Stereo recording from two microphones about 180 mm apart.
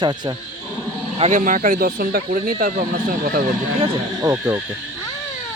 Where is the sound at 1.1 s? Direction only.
40° right (ahead or behind).